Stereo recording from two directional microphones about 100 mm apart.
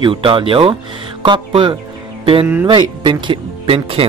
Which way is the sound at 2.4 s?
25° right (ahead or behind).